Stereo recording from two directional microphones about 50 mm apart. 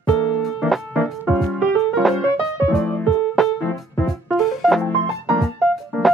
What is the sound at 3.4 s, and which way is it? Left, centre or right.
Music, centre.